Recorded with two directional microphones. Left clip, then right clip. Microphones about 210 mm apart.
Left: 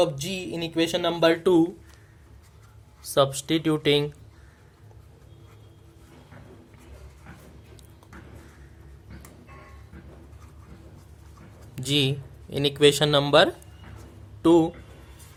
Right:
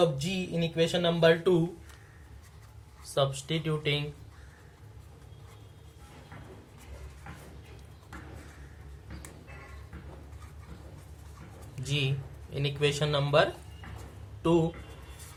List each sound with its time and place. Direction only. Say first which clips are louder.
0.0 s speech: left 3 dB; 50° left (ahead or behind)
3.0 s speech: left 7 dB; 50° left (ahead or behind)
11.7 s speech: left 9 dB; 50° left (ahead or behind)